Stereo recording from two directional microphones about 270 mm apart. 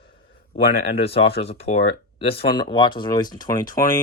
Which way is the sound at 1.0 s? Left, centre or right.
Left.